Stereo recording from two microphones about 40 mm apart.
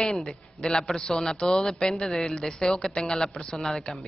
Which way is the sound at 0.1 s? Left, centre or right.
Centre.